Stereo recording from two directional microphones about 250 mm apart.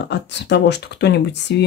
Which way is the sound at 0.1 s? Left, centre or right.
Left.